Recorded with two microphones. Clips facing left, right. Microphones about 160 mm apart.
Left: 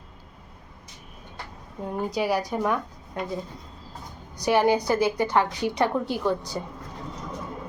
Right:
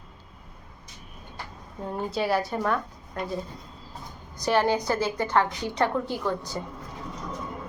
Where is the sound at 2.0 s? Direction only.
15° left (ahead or behind).